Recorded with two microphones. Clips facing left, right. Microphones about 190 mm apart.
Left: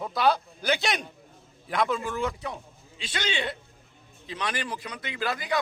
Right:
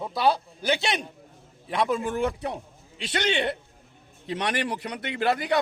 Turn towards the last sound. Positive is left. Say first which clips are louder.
# right 6 dB
turn(degrees=-65)  # may be behind; listen again after turning